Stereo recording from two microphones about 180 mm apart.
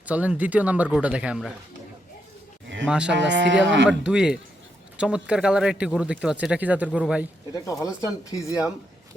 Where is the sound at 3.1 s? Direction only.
80° right.